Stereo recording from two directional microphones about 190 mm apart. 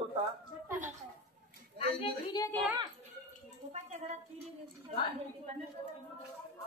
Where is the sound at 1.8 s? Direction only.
25° left (ahead or behind).